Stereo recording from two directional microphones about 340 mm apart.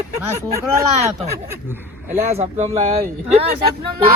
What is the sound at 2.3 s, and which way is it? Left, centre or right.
Speech, centre.